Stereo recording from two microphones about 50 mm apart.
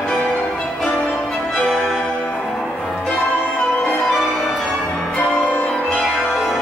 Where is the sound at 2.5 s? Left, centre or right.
Centre.